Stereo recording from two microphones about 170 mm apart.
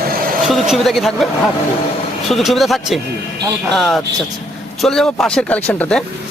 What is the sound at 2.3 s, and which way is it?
Speech, centre (ahead or behind).